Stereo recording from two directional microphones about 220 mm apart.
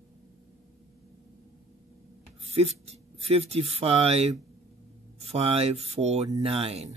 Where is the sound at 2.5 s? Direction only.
30° right (ahead or behind).